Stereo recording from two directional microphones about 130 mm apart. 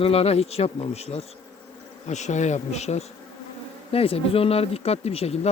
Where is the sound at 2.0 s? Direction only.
60° left (ahead or behind).